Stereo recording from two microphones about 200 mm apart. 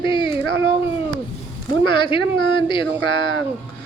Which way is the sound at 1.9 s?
25° left (ahead or behind).